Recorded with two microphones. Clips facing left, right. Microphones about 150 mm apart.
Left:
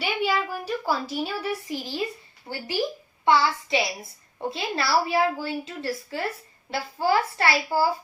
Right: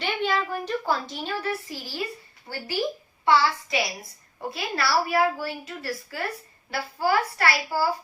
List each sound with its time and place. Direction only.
0.0 s a woman's voice: 5° left (ahead or behind)
3.2 s a woman's voice: 25° left (ahead or behind)